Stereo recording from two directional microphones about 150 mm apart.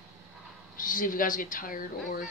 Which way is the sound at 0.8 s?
65° left (ahead or behind).